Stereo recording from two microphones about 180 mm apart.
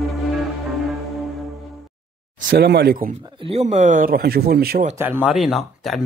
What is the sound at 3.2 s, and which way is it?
Speech, 30° right (ahead or behind).